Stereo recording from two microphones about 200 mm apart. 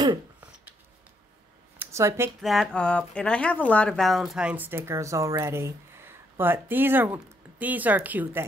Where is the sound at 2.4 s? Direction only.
Centre (ahead or behind).